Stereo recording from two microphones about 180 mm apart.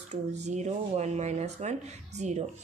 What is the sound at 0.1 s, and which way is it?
Speech, 40° right (ahead or behind).